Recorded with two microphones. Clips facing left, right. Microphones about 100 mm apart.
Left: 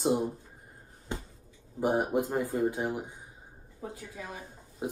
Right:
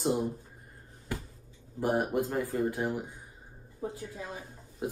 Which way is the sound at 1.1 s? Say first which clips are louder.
Even; 25° left (ahead or behind).